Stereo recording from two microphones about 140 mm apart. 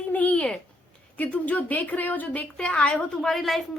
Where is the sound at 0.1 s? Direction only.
10° left (ahead or behind).